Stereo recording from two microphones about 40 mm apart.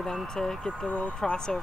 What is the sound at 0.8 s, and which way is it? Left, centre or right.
Speech, left.